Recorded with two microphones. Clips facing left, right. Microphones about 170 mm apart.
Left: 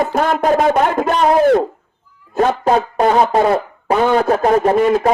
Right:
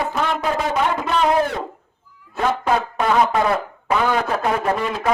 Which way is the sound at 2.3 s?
35° left (ahead or behind).